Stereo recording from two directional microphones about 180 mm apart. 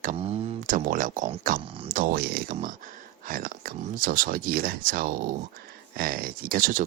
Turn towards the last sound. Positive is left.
turn(degrees=-50)  # may be behind; listen again after turning